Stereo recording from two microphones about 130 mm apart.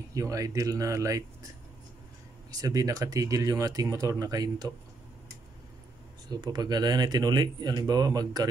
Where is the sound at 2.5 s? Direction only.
25° right (ahead or behind).